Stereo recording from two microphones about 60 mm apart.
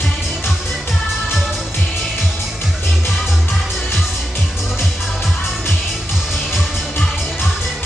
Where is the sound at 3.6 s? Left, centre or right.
Centre.